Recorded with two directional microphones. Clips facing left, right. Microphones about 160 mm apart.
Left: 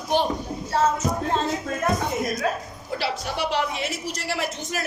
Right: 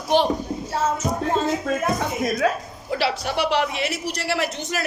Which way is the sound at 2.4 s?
90° right.